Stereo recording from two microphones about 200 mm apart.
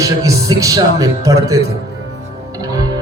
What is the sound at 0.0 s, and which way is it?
A man's voice, 15° right (ahead or behind).